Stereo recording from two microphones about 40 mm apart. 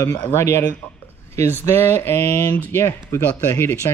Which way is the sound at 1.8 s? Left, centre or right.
Left.